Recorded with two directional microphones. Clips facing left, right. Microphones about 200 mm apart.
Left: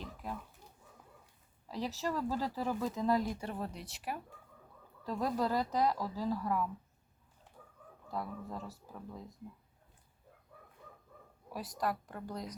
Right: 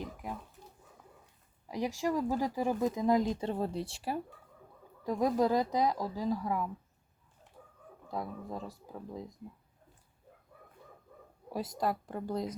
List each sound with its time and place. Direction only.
0.0 s a sound: 15° right (ahead or behind)
1.6 s speech: 15° right (ahead or behind)
5.0 s speech: 15° right (ahead or behind)
8.0 s speech: 15° right (ahead or behind)
11.4 s speech: 25° right (ahead or behind)